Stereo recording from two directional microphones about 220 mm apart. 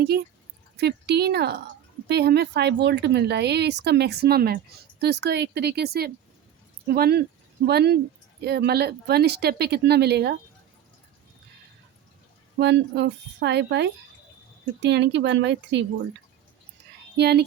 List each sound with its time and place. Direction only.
0.8 s speech: 50° right (ahead or behind)
12.5 s speech: 50° right (ahead or behind)
17.2 s speech: 50° right (ahead or behind)